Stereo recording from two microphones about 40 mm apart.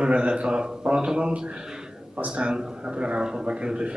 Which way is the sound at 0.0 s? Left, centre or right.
Right.